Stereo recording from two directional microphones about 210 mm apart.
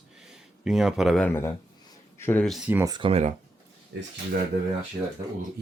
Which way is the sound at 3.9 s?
55° right (ahead or behind).